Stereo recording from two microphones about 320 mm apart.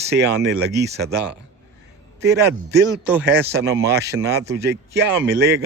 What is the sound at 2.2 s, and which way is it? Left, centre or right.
Speech, right.